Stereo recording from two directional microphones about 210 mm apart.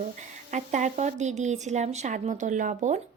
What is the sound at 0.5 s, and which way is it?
Speech, 35° right (ahead or behind).